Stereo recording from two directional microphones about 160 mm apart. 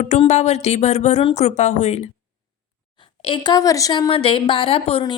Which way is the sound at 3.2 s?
30° left (ahead or behind).